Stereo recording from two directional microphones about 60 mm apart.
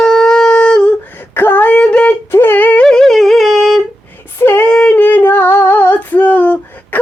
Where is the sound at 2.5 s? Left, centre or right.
Left.